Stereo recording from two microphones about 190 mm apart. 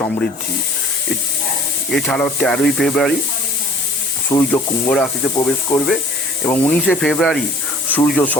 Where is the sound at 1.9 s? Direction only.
5° left (ahead or behind).